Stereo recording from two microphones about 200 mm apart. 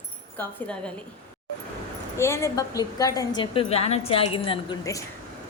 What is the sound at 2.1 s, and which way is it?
A woman's voice, 15° left (ahead or behind).